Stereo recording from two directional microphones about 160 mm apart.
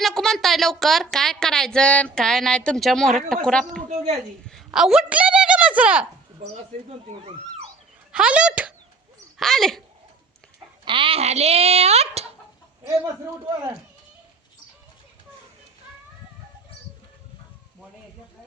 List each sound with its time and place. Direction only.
0.0 s a woman's voice: centre (ahead or behind)
3.8 s a woman's voice: 45° right (ahead or behind)
4.4 s a woman's voice: centre (ahead or behind)
8.1 s a woman's voice: 5° right (ahead or behind)
10.8 s a child's voice: 30° right (ahead or behind)